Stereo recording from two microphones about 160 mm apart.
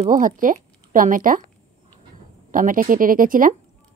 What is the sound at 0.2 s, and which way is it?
Speech, 55° right (ahead or behind).